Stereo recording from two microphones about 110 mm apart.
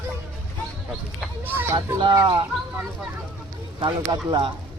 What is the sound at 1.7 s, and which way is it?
Speech, 40° right (ahead or behind).